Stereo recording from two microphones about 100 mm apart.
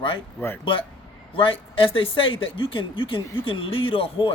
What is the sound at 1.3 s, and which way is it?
A man's voice, 60° left (ahead or behind).